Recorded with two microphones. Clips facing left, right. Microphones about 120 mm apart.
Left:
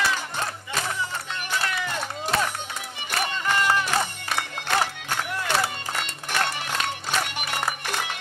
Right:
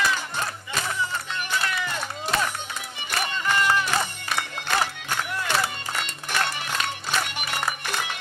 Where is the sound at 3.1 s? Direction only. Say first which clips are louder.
Even; 35° left (ahead or behind).